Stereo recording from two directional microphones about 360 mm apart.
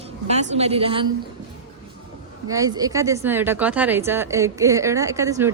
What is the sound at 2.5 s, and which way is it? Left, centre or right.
Speech, centre.